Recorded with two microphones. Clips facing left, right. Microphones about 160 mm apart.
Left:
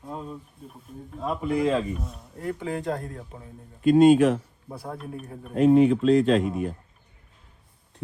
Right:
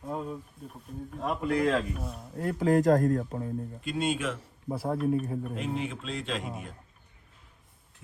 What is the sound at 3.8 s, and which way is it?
Speech, 50° left (ahead or behind).